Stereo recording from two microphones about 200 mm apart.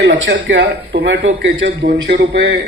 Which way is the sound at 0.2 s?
60° right (ahead or behind).